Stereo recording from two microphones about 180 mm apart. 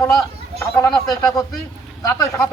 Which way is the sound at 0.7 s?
20° left (ahead or behind).